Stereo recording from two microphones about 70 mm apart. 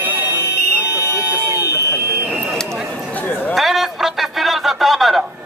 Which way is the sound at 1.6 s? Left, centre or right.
Left.